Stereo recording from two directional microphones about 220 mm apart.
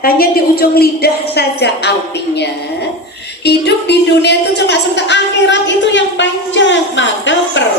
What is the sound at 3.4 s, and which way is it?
A woman's voice, 50° left (ahead or behind).